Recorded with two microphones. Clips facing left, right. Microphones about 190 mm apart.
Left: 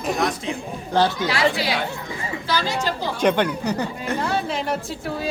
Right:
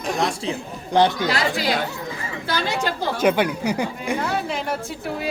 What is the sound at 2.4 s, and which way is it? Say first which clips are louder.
Speech: even; 55° right (ahead or behind).